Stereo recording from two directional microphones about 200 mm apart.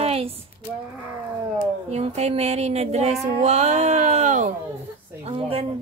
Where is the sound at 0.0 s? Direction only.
30° right (ahead or behind).